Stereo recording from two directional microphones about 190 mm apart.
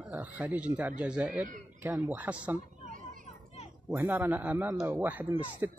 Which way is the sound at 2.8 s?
45° right (ahead or behind).